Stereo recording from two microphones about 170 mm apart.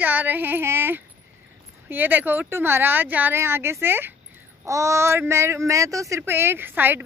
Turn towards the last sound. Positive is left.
turn(degrees=-10)  # may be behind; listen again after turning